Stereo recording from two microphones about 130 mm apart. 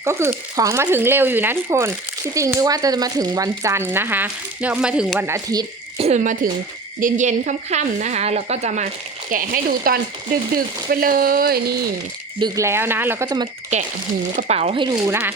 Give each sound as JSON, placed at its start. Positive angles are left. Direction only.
{"t": 0.0, "sound": "speech", "side_deg": -20}
{"t": 5.2, "sound": "speech", "side_deg": -25}
{"t": 6.0, "sound": "speech", "side_deg": -60}
{"t": 9.3, "sound": "speech", "side_deg": -90}
{"t": 12.4, "sound": "speech", "side_deg": -25}
{"t": 13.2, "sound": "speech", "side_deg": -30}
{"t": 13.7, "sound": "speech", "side_deg": -60}
{"t": 14.8, "sound": "speech", "side_deg": -30}